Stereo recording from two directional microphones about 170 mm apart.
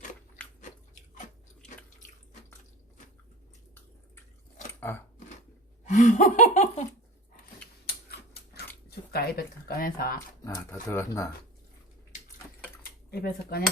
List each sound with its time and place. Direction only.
5.8 s speech: 45° left (ahead or behind)
7.9 s scissors: 65° left (ahead or behind)
9.1 s speech: 65° left (ahead or behind)
10.4 s speech: 15° left (ahead or behind)
12.8 s speech: 65° left (ahead or behind)